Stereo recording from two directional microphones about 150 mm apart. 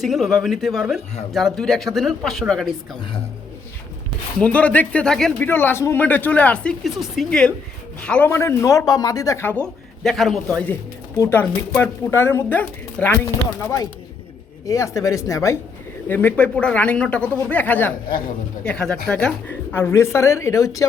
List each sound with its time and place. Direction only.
0.0 s speech: centre (ahead or behind)
4.4 s speech: 10° left (ahead or behind)
5.5 s a woman's voice: 15° left (ahead or behind)
10.0 s a woman's voice: centre (ahead or behind); by 20.8 s 20° left (ahead or behind)